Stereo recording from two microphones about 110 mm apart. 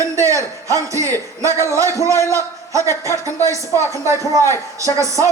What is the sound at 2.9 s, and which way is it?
Speech, 25° left (ahead or behind).